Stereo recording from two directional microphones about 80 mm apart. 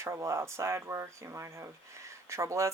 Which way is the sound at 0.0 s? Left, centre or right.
Right.